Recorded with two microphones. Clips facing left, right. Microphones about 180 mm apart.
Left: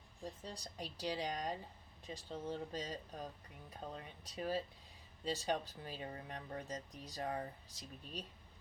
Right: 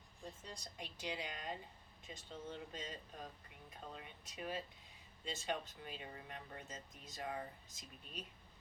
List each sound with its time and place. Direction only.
0.4 s speech: 35° left (ahead or behind)